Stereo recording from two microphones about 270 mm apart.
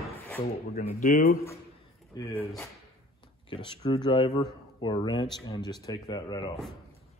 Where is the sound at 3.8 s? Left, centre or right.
Centre.